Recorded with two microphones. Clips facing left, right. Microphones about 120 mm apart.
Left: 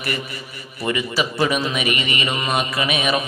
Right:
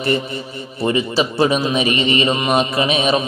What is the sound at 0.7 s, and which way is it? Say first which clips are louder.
A man's voice: right 5 dB; 25° right (ahead or behind).